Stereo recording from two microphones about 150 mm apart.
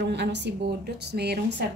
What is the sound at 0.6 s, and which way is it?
Speech, 90° right.